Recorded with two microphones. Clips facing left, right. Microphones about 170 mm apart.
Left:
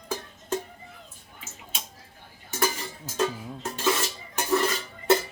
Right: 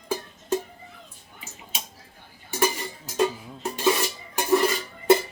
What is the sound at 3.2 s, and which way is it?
Dishes, 15° right (ahead or behind).